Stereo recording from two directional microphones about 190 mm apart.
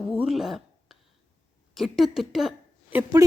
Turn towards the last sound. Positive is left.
turn(degrees=-15)  # may be behind; listen again after turning